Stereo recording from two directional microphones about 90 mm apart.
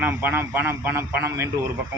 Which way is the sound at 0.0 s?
20° right (ahead or behind).